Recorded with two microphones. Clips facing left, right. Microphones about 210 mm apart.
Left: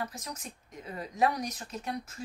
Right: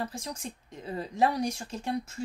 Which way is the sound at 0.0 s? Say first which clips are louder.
Right 3 dB; 30° right (ahead or behind).